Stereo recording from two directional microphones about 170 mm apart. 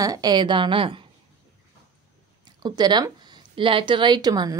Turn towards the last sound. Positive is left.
turn(degrees=-25)  # may be behind; listen again after turning